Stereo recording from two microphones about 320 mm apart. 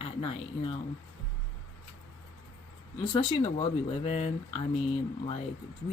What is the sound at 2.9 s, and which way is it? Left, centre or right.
Speech, centre.